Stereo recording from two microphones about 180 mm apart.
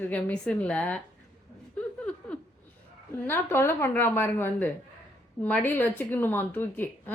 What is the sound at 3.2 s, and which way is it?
A woman's voice, 10° left (ahead or behind).